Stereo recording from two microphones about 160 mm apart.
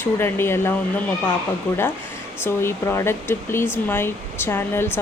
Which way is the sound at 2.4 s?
15° left (ahead or behind).